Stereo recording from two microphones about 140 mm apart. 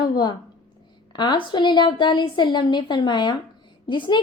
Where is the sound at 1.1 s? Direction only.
30° left (ahead or behind).